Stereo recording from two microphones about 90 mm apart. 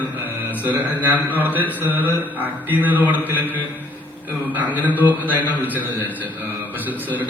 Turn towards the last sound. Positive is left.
turn(degrees=-20)  # may be behind; listen again after turning